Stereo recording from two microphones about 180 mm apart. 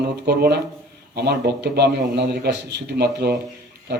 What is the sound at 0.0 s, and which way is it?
A man's voice, 65° right (ahead or behind).